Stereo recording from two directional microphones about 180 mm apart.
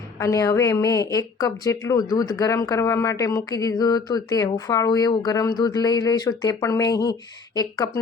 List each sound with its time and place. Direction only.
0.2 s a woman's voice: 15° left (ahead or behind)